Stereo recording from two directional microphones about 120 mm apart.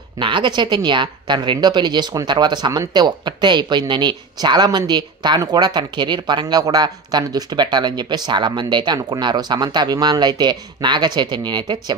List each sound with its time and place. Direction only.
0.2 s speech: 40° right (ahead or behind)